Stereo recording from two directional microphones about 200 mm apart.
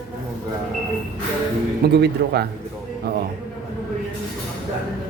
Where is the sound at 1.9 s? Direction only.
55° right (ahead or behind).